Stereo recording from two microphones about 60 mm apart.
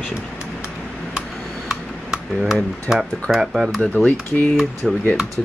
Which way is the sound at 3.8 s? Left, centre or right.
Centre.